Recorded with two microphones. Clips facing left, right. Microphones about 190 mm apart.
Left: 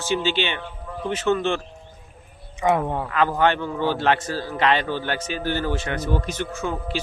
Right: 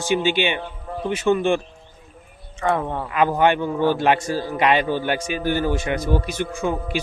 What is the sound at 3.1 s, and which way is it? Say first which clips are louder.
A man's voice: right 3 dB; 15° right (ahead or behind).